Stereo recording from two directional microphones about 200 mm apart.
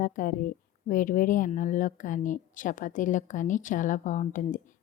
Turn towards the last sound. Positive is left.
turn(degrees=40)  # may be behind; listen again after turning